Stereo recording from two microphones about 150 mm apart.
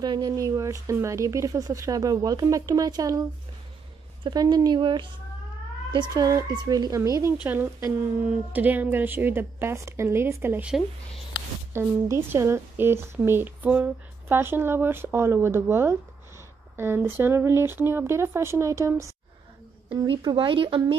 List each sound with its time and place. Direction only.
0.0 s speech: 30° right (ahead or behind)
4.2 s speech: 30° right (ahead or behind)